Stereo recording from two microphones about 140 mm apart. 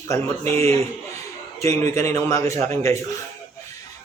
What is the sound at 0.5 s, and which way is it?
Speech, 45° right (ahead or behind).